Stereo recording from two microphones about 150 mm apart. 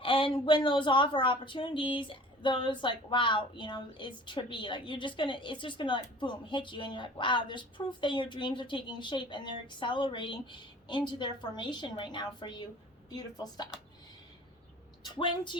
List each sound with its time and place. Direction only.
0.0 s a woman's voice: 35° left (ahead or behind)
15.0 s a woman's voice: 30° left (ahead or behind)